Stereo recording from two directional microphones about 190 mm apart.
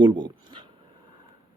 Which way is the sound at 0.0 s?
25° right (ahead or behind).